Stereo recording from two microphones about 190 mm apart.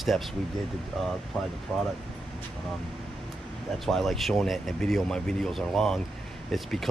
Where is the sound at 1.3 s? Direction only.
5° left (ahead or behind).